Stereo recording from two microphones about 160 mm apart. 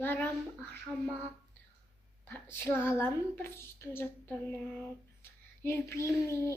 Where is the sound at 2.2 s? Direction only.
15° left (ahead or behind).